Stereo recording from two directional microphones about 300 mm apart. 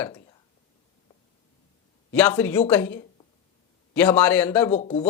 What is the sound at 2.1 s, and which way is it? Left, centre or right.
Speech, centre.